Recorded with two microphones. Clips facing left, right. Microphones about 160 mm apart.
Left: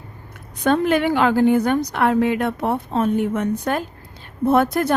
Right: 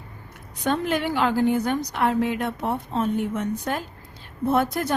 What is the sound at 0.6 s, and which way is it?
A woman's voice, 60° left (ahead or behind).